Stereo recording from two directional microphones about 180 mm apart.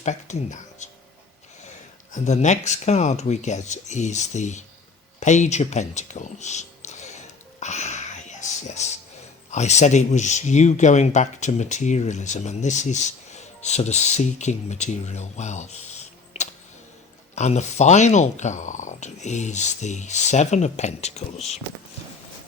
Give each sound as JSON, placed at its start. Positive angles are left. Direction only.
{"t": 0.0, "sound": "speech", "side_deg": 40}
{"t": 2.2, "sound": "speech", "side_deg": 40}
{"t": 7.6, "sound": "a sound", "side_deg": 40}
{"t": 9.5, "sound": "speech", "side_deg": 40}
{"t": 17.3, "sound": "speech", "side_deg": 40}